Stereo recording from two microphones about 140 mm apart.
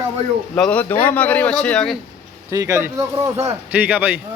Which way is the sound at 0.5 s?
10° left (ahead or behind).